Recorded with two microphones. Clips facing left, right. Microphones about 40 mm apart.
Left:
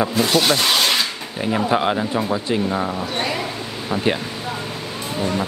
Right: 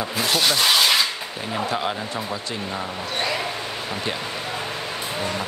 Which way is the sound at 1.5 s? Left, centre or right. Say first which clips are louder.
Left 6 dB; left.